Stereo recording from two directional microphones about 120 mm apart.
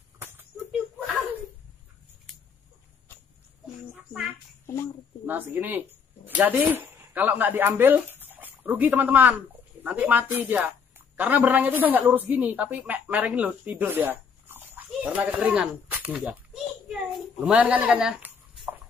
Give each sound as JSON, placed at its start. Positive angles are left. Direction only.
{"t": 5.2, "sound": "a woman's voice", "side_deg": -15}